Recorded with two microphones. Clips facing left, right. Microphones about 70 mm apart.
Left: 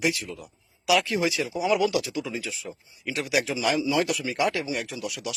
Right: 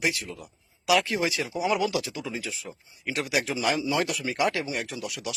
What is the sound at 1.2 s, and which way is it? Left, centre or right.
Speech, centre.